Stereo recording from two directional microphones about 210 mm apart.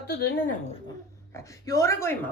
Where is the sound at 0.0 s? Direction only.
45° left (ahead or behind).